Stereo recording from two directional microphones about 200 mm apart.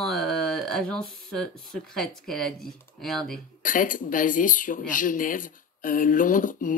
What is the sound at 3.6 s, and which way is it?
Speech, 40° left (ahead or behind).